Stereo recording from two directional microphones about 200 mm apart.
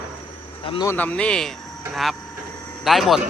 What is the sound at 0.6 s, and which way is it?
Speech, 25° left (ahead or behind).